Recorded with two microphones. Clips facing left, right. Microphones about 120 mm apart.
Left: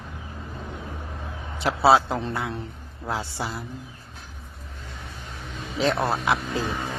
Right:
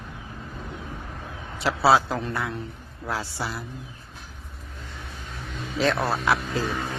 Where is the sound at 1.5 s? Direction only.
20° left (ahead or behind).